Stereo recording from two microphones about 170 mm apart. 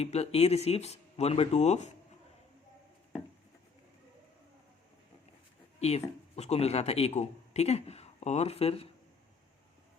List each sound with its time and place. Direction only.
0.0 s a man's voice: 40° left (ahead or behind)
5.8 s a man's voice: 40° left (ahead or behind)